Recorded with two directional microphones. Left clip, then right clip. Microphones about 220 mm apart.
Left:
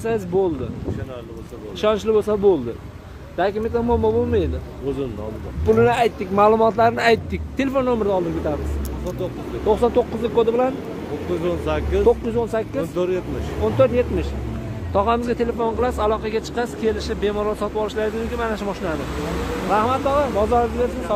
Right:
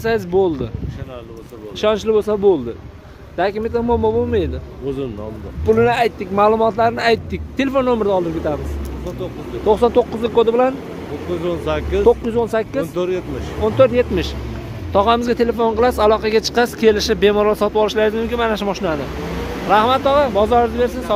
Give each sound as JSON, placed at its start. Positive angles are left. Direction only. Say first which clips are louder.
{"t": 0.0, "sound": "speech", "louder": "right 4 dB", "side_deg": -20}
{"t": 1.8, "sound": "speech", "louder": "right 2 dB", "side_deg": -20}
{"t": 5.7, "sound": "speech", "louder": "right 2 dB", "side_deg": -10}
{"t": 7.5, "sound": "speech", "louder": "right 4 dB", "side_deg": -25}
{"t": 9.7, "sound": "speech", "louder": "right 4 dB", "side_deg": -25}
{"t": 11.3, "sound": "speech", "louder": "right 2 dB", "side_deg": -40}
{"t": 12.1, "sound": "speech", "louder": "right 5 dB", "side_deg": -30}
{"t": 12.9, "sound": "speech", "louder": "right 2 dB", "side_deg": -45}